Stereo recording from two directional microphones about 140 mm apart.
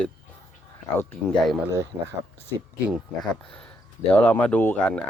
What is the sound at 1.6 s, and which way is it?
Speech, 20° right (ahead or behind).